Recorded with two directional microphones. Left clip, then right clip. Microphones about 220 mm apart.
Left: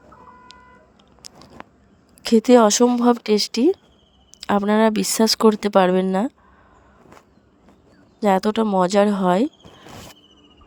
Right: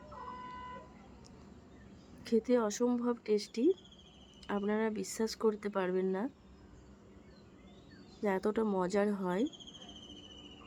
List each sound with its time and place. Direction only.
1.2 s a sound: 45° left (ahead or behind)
2.2 s speech: 45° left (ahead or behind)
8.2 s speech: 45° left (ahead or behind)